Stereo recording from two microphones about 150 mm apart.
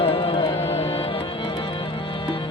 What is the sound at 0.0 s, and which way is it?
Music, 40° left (ahead or behind).